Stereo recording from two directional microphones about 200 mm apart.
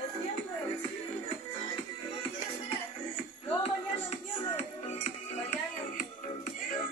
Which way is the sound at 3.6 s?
30° left (ahead or behind).